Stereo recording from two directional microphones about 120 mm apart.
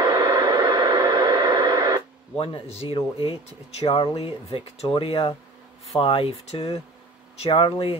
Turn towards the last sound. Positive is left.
turn(degrees=50)  # may be behind; listen again after turning